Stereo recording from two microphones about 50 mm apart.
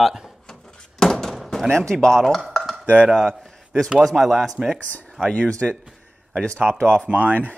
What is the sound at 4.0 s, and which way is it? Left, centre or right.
Speech, centre.